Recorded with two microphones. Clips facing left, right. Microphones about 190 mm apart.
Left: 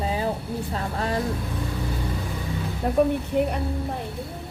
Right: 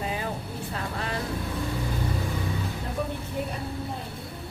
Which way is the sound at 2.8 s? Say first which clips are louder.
Left 15 dB; 65° left (ahead or behind).